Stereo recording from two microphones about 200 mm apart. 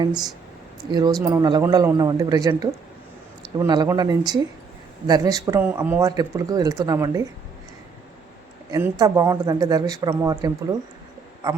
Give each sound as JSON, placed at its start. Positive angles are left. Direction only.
{"t": 0.0, "sound": "a man's voice", "side_deg": -20}
{"t": 8.7, "sound": "a man's voice", "side_deg": -15}